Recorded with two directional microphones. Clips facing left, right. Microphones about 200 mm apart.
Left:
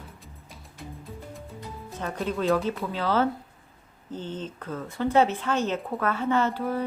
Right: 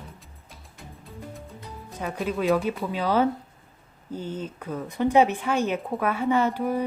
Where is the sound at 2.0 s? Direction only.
10° right (ahead or behind).